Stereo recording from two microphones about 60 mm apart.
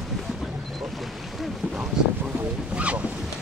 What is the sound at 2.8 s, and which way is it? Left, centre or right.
Boat, right.